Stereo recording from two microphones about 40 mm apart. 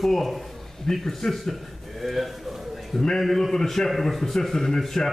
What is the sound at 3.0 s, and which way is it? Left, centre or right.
A man's voice, centre.